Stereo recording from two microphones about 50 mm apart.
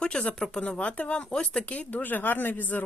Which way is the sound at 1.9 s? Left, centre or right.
Left.